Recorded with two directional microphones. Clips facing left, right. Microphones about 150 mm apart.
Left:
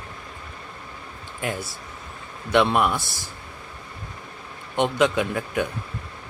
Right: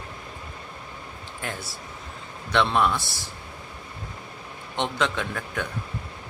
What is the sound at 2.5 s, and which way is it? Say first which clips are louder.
Speech: left 3 dB; 15° left (ahead or behind).